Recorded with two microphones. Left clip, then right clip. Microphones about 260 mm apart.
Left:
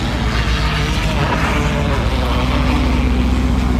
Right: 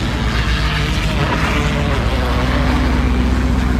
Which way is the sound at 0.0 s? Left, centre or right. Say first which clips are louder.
Even; centre.